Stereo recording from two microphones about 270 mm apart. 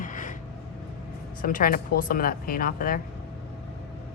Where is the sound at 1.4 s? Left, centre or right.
Left.